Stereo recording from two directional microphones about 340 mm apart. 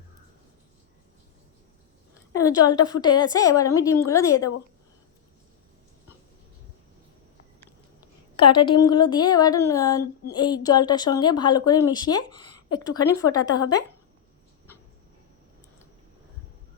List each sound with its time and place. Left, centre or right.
2.7 s speech: centre
8.4 s speech: centre